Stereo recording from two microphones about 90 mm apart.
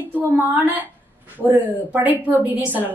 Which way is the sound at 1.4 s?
20° right (ahead or behind).